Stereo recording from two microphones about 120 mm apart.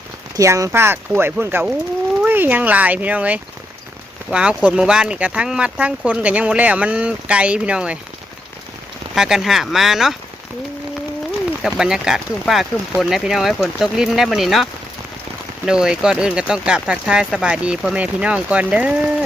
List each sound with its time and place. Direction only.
0.3 s speech: 25° right (ahead or behind); by 7.9 s 10° right (ahead or behind)
9.1 s speech: 5° right (ahead or behind)
11.6 s speech: 5° right (ahead or behind)